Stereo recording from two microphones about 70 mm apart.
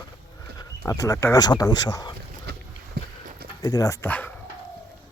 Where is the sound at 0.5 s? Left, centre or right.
Left.